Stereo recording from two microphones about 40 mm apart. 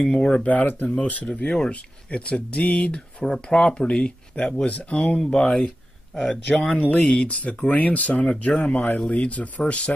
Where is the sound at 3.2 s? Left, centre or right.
Centre.